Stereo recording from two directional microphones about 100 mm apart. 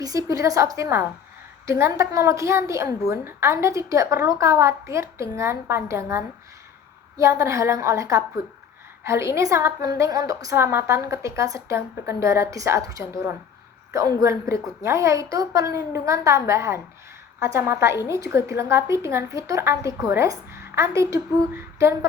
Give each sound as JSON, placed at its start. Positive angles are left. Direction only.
{"t": 0.0, "sound": "a woman's voice", "side_deg": -35}